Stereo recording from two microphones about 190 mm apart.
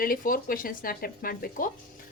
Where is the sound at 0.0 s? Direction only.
50° left (ahead or behind).